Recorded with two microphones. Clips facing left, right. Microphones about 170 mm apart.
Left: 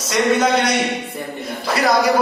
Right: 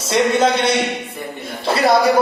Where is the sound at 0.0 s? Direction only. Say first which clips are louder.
Right 1 dB; 30° right (ahead or behind).